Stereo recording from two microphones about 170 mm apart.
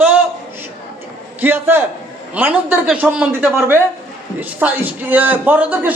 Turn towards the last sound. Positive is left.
turn(degrees=-10)  # may be behind; listen again after turning